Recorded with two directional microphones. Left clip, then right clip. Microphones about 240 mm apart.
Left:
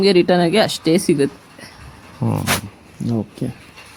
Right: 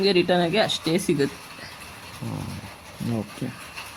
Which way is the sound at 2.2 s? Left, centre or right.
Left.